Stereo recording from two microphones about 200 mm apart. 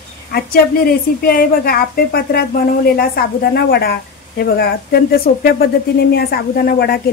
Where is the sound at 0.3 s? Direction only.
50° left (ahead or behind).